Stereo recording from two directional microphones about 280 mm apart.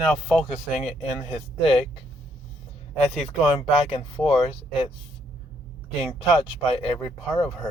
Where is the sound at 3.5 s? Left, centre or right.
Centre.